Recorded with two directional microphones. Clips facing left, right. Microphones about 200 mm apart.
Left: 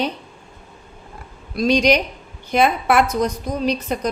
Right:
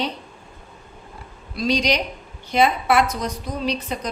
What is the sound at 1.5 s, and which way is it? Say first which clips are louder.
A woman's voice: left 5 dB; 50° left (ahead or behind).